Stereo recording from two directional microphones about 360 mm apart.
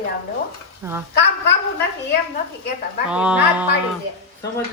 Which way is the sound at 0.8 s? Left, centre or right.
Centre.